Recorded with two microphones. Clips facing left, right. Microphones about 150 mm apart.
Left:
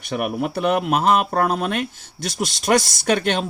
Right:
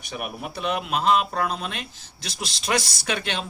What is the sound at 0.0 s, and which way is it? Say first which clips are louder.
Speech: left 9 dB; 60° left (ahead or behind).